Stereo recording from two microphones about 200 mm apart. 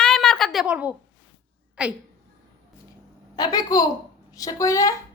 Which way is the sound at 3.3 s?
20° left (ahead or behind).